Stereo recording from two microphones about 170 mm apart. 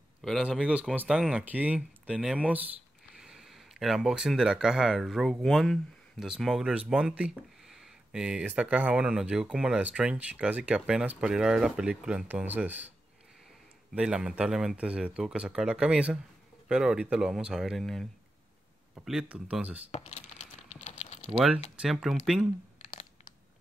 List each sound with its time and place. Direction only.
0.2 s speech: centre (ahead or behind)
13.9 s speech: 5° right (ahead or behind)
19.9 s computer keyboard: 40° left (ahead or behind)
21.3 s speech: 5° right (ahead or behind)